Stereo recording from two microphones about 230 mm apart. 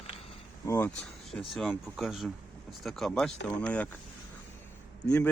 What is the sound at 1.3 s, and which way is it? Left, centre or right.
Speech, centre.